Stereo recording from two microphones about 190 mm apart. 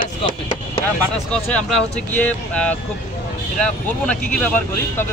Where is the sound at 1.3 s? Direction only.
5° left (ahead or behind).